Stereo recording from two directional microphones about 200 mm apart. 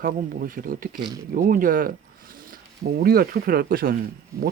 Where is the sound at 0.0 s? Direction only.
45° right (ahead or behind).